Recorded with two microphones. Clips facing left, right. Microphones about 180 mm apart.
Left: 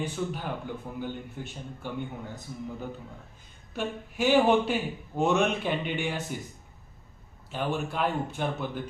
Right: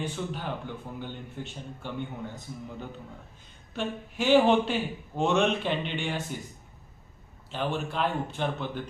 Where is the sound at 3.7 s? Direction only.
10° left (ahead or behind).